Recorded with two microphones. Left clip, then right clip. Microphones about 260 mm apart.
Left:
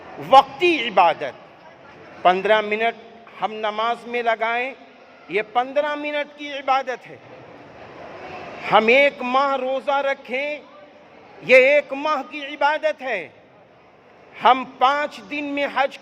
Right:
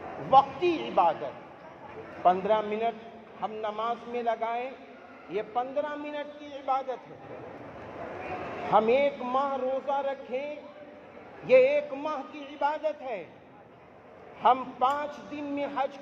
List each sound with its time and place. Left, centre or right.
0.3 s a man's voice: left
2.2 s a man's voice: left
8.7 s a man's voice: left
14.3 s a man's voice: left